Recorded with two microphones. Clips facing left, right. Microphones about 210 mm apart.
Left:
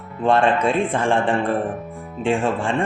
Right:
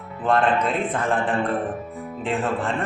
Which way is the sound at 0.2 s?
30° left (ahead or behind).